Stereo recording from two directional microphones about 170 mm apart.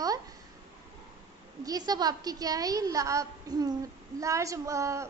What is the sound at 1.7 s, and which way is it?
A woman's voice, 25° right (ahead or behind).